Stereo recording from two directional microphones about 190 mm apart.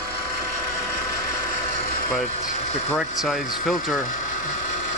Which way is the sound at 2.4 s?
40° left (ahead or behind).